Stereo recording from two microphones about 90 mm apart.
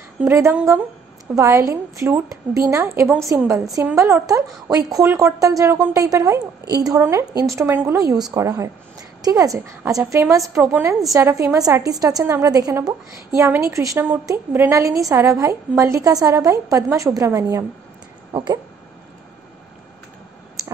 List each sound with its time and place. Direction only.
0.2 s a woman's voice: 30° right (ahead or behind)
4.6 s a woman's voice: 40° right (ahead or behind)
7.0 s a woman's voice: 30° right (ahead or behind)
7.7 s speech: 25° right (ahead or behind)
8.0 s a woman's voice: 40° right (ahead or behind)
10.5 s speech: 25° right (ahead or behind)
11.1 s a woman's voice: 35° right (ahead or behind)
18.3 s speech: 55° right (ahead or behind)